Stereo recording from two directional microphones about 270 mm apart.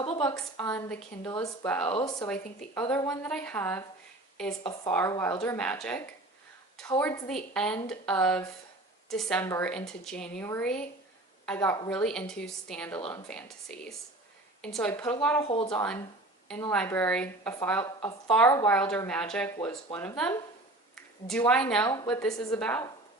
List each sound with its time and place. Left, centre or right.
0.6 s a woman's voice: centre
1.9 s speech: centre
3.1 s a woman's voice: centre